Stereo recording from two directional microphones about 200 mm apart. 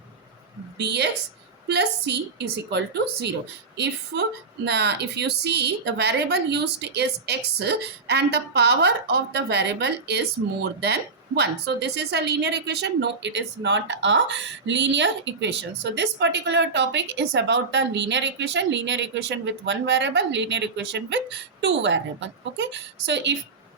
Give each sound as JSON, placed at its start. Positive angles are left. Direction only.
{"t": 0.8, "sound": "a woman's voice", "side_deg": -55}